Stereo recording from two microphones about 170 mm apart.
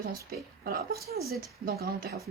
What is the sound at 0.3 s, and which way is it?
Speech, 60° right (ahead or behind).